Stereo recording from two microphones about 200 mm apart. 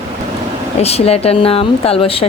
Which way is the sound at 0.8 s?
30° left (ahead or behind).